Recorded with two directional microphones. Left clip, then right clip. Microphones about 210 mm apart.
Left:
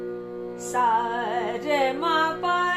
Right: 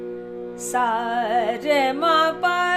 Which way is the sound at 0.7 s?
55° right (ahead or behind).